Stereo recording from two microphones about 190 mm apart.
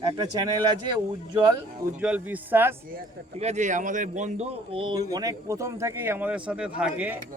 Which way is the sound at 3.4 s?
35° right (ahead or behind).